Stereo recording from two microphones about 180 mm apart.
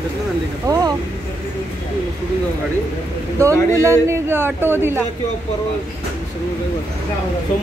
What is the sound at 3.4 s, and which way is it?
Speech, 15° right (ahead or behind).